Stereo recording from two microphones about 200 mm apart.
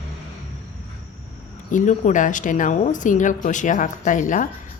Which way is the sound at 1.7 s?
40° left (ahead or behind).